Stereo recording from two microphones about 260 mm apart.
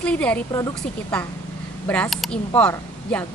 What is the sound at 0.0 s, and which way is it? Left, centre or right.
Speech, centre.